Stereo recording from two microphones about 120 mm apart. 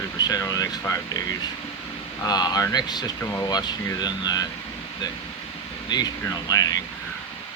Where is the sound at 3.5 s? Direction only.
35° left (ahead or behind).